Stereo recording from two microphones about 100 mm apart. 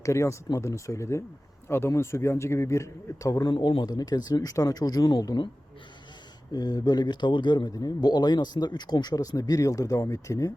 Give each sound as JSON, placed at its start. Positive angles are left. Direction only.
{"t": 0.0, "sound": "a man's voice", "side_deg": 30}
{"t": 3.5, "sound": "a man's voice", "side_deg": 55}
{"t": 3.8, "sound": "speech", "side_deg": 40}
{"t": 6.5, "sound": "a man's voice", "side_deg": 40}